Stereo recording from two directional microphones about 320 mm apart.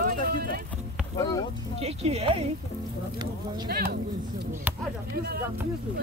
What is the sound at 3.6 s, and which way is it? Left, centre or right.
Speech, right.